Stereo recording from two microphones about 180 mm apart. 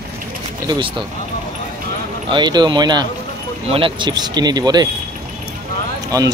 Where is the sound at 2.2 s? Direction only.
25° right (ahead or behind).